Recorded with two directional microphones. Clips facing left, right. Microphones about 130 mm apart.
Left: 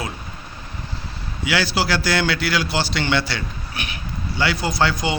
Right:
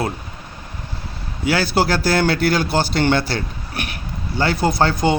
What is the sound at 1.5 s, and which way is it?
Speech, 45° right (ahead or behind).